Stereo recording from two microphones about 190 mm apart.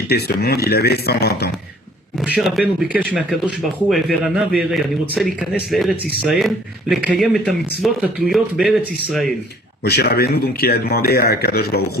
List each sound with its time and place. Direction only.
0.1 s speech: 55° left (ahead or behind)
2.1 s speech: 5° right (ahead or behind)
9.8 s speech: 60° left (ahead or behind)